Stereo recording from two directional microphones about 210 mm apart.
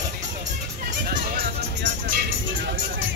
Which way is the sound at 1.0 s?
45° right (ahead or behind).